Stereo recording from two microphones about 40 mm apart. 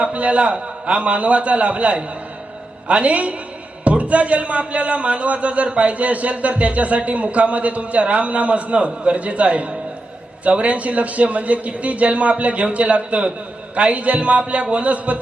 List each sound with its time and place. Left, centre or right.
0.0 s a man's voice: right